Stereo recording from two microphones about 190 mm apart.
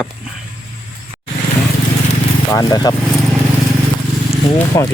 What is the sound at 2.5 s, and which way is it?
Speech, 20° left (ahead or behind).